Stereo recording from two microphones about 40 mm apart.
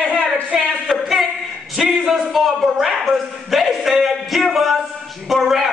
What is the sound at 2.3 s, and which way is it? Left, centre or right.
Speech, centre.